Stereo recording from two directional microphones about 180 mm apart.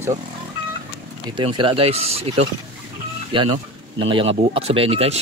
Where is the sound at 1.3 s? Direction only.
25° right (ahead or behind).